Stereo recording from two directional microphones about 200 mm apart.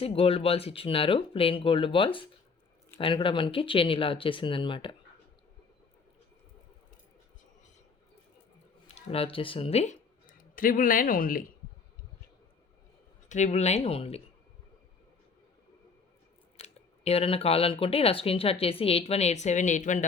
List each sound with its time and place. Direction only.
0.0 s speech: 30° left (ahead or behind)
9.0 s speech: 30° left (ahead or behind)
13.2 s speech: 35° left (ahead or behind)
16.6 s speech: 30° left (ahead or behind)